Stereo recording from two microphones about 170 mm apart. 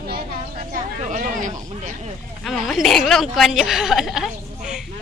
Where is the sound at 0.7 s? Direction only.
45° right (ahead or behind).